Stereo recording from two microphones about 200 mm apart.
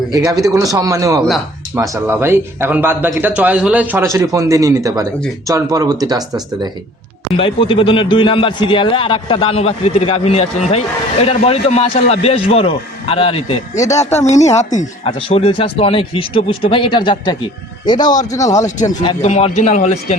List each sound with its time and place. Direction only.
0.5 s speech: 15° right (ahead or behind)
7.3 s a man's voice: 25° left (ahead or behind)
13.7 s a man's voice: 15° left (ahead or behind)
14.3 s a man's voice: 35° left (ahead or behind); by 18.6 s 15° left (ahead or behind)
19.0 s a man's voice: 30° left (ahead or behind)